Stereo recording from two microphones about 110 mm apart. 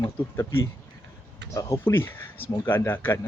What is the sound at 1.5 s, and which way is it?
A man's voice, 30° left (ahead or behind).